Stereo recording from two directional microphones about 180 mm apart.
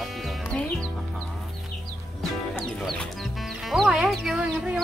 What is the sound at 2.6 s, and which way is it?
Chicken, 5° left (ahead or behind).